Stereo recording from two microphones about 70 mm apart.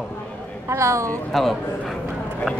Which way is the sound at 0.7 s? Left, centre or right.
Right.